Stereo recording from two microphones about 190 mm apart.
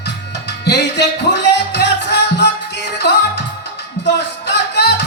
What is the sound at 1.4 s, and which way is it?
Music, 65° left (ahead or behind).